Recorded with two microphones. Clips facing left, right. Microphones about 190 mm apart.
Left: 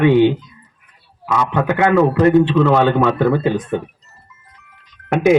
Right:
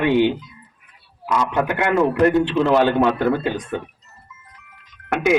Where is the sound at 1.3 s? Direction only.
70° left (ahead or behind).